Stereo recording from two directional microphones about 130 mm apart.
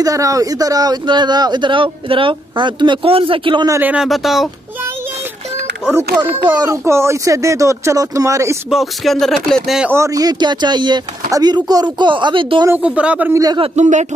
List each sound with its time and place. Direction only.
0.0 s speech: 25° right (ahead or behind); by 3.6 s 40° right (ahead or behind)
3.8 s speech: 5° right (ahead or behind)
6.5 s speech: 30° right (ahead or behind)
8.6 s speech: centre (ahead or behind)
9.8 s speech: 20° right (ahead or behind); by 12.6 s 40° right (ahead or behind)
12.6 s speech: 10° right (ahead or behind)
13.3 s speech: 30° right (ahead or behind)
13.7 s speech: 65° right (ahead or behind)